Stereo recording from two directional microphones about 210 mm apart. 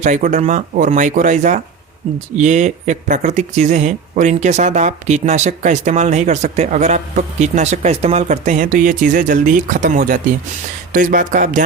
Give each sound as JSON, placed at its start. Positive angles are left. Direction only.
{"t": 0.0, "sound": "speech", "side_deg": -35}